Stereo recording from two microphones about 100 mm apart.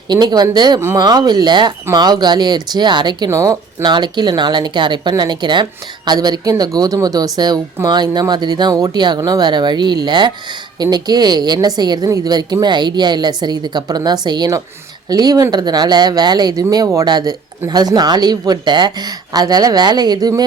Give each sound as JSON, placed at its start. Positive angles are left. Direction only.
{"t": 0.1, "sound": "a woman's voice", "side_deg": -45}
{"t": 3.2, "sound": "a woman's voice", "side_deg": -35}